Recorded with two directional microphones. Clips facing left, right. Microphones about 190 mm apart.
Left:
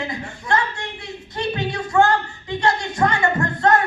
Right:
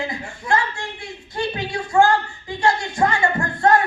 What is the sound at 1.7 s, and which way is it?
Speech, 25° right (ahead or behind).